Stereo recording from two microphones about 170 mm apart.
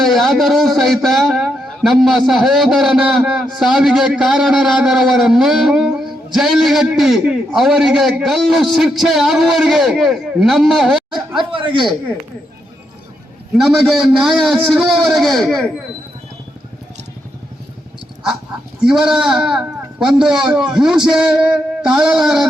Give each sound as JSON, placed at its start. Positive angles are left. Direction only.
{"t": 0.0, "sound": "a man's voice", "side_deg": 0}
{"t": 11.5, "sound": "speech", "side_deg": -30}
{"t": 13.6, "sound": "a man's voice", "side_deg": 0}
{"t": 18.8, "sound": "a man's voice", "side_deg": -5}